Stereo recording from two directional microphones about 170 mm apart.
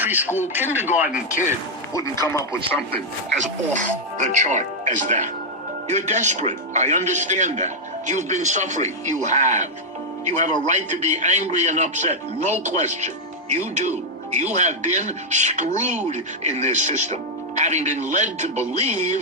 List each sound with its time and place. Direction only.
0.0 s speech: 10° right (ahead or behind)
2.2 s speech: 15° left (ahead or behind)
3.3 s a man's voice: 45° right (ahead or behind)